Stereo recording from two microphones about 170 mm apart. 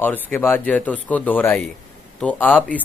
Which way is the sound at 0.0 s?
10° left (ahead or behind).